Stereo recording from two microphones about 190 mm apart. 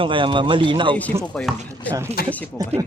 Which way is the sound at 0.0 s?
25° right (ahead or behind).